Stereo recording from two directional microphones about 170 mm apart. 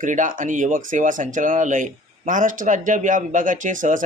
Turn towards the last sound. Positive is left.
turn(degrees=-50)  # may be behind; listen again after turning